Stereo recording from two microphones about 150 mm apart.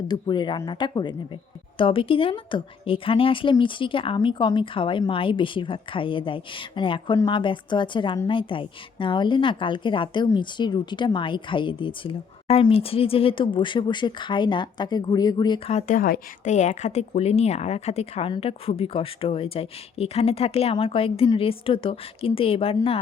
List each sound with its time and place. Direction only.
0.1 s speech: 30° left (ahead or behind)
15.7 s speech: 65° left (ahead or behind)
16.5 s speech: 55° left (ahead or behind); by 23.0 s 35° left (ahead or behind)